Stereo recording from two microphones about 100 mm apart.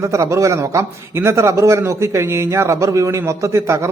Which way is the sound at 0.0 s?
30° right (ahead or behind).